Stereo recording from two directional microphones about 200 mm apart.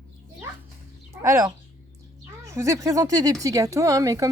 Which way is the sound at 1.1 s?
15° right (ahead or behind).